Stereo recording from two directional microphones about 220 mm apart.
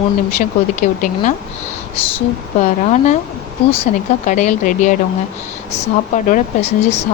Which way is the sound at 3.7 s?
30° left (ahead or behind).